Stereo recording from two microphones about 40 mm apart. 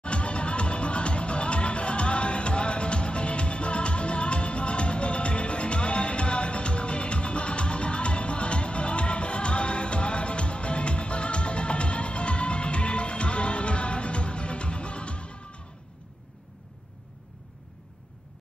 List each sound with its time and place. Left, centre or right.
0.0 s music: left